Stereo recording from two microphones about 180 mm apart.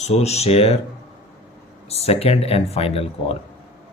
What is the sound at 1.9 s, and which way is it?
Speech, 35° left (ahead or behind).